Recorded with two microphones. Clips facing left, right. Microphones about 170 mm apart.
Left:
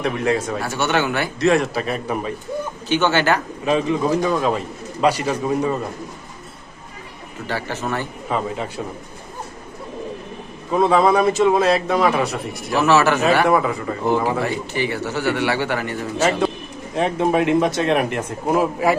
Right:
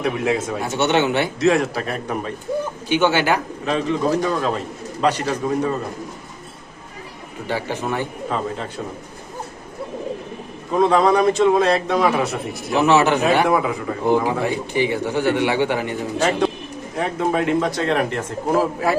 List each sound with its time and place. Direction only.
0.0 s a man's voice: 5° right (ahead or behind)
0.6 s speech: 20° right (ahead or behind)
1.4 s a man's voice: centre (ahead or behind)
2.9 s speech: 10° right (ahead or behind)
3.7 s speech: 5° left (ahead or behind)
7.4 s speech: 15° right (ahead or behind)
8.3 s speech: 10° left (ahead or behind)
10.7 s a man's voice: 5° left (ahead or behind)
12.7 s speech: 15° right (ahead or behind)
13.5 s a man's voice: centre (ahead or behind)
14.1 s speech: 15° right (ahead or behind)
16.1 s speech: 5° left (ahead or behind)
16.9 s speech: 20° left (ahead or behind)